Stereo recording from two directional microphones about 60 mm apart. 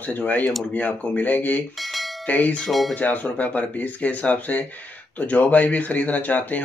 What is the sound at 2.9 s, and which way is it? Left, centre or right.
Speech, left.